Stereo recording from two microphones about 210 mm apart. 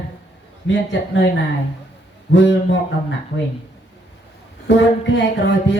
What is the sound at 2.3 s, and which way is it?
Speech, 60° left (ahead or behind).